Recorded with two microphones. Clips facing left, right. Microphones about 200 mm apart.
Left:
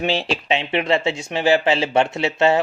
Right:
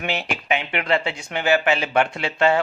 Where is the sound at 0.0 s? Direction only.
30° left (ahead or behind).